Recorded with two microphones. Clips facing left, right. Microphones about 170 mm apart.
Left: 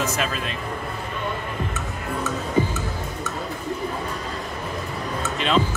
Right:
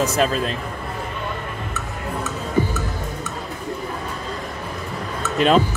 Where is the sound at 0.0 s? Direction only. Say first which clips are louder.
Right 6 dB; 35° right (ahead or behind).